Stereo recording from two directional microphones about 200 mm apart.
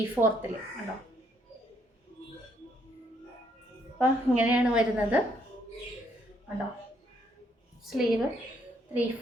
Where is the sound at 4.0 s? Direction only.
5° right (ahead or behind).